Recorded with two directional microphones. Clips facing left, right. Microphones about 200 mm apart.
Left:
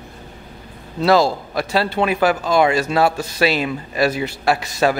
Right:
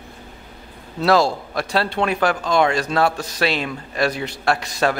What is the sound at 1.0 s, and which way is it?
A man's voice, centre (ahead or behind).